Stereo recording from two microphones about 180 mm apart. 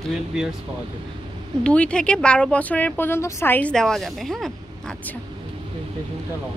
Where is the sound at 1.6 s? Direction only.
5° left (ahead or behind).